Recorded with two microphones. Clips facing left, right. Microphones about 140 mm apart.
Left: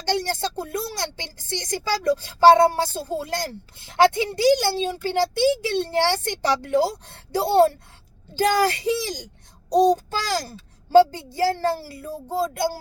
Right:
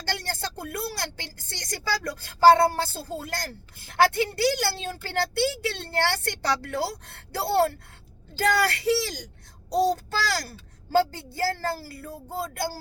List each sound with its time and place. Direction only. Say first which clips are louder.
0.0 s a woman's voice: left 7 dB; 20° left (ahead or behind)